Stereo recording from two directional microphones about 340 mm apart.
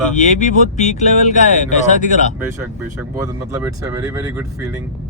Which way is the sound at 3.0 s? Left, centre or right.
Centre.